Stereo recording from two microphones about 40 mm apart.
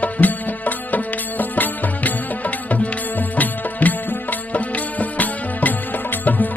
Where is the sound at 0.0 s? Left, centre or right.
Left.